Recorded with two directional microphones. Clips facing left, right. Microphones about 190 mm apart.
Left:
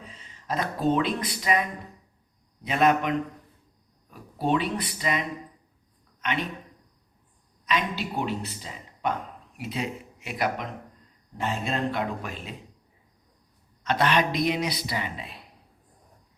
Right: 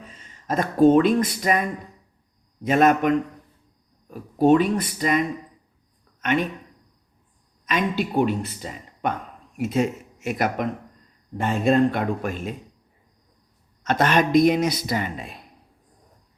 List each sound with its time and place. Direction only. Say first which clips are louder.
0.1 s speech: right 5 dB; 45° right (ahead or behind)
2.6 s speech: right 5 dB; 45° right (ahead or behind)
6.2 s speech: right 8 dB; 50° right (ahead or behind)
7.6 s speech: right 4 dB; 50° right (ahead or behind)
13.8 s speech: right 4 dB; 45° right (ahead or behind)